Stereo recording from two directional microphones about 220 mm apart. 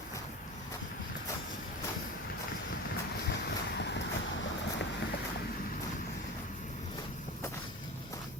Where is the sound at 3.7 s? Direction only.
50° left (ahead or behind).